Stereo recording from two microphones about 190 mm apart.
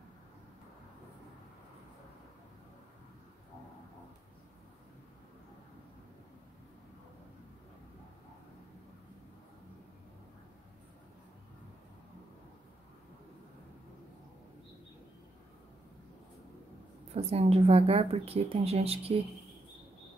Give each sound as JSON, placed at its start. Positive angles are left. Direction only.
{"t": 17.3, "sound": "speech", "side_deg": -30}